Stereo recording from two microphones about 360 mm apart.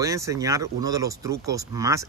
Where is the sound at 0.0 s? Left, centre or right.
Centre.